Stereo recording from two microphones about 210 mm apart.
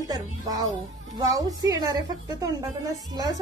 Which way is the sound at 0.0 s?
20° right (ahead or behind).